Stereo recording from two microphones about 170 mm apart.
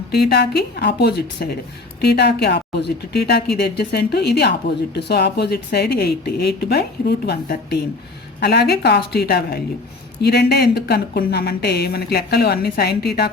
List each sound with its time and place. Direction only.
0.1 s a woman's voice: 75° left (ahead or behind)